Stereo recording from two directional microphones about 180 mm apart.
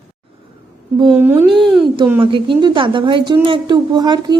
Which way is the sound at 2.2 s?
30° right (ahead or behind).